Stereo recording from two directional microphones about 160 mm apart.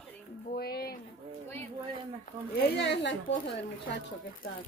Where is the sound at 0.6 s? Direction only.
75° left (ahead or behind).